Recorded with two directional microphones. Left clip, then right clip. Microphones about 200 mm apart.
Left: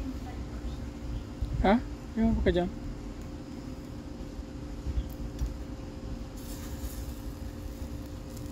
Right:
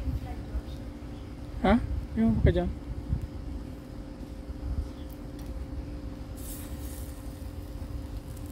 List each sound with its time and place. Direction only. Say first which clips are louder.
1.6 s speech: even; 5° right (ahead or behind)